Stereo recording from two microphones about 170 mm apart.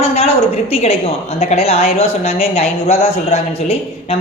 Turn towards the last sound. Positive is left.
turn(degrees=35)  # may be behind; listen again after turning